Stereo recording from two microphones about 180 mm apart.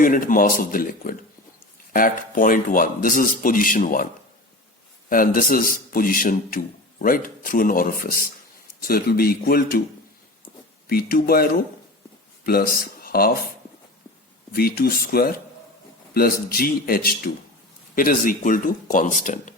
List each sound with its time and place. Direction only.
0.0 s a man's voice: 50° left (ahead or behind)
5.0 s a man's voice: 50° left (ahead or behind)
10.8 s a man's voice: 55° left (ahead or behind)
14.5 s a man's voice: 60° left (ahead or behind)